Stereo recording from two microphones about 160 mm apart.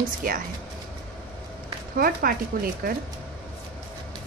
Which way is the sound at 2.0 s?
65° right (ahead or behind).